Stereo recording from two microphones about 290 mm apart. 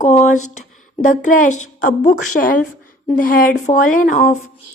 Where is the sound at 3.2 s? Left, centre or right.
Left.